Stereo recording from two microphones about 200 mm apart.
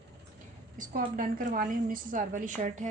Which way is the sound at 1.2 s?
45° right (ahead or behind).